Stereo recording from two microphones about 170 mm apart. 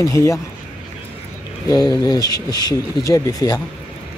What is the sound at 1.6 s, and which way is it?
Speech, 20° left (ahead or behind).